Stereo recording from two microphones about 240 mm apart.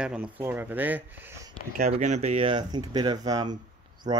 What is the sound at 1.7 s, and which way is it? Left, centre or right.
Speech, right.